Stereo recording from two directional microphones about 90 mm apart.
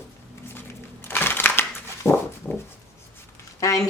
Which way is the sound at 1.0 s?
25° left (ahead or behind).